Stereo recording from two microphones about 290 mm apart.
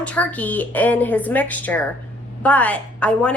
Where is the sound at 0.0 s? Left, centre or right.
Centre.